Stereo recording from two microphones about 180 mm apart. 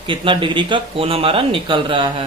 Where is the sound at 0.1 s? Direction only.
30° right (ahead or behind).